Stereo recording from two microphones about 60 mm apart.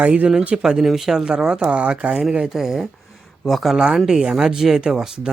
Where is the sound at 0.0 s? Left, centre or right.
Right.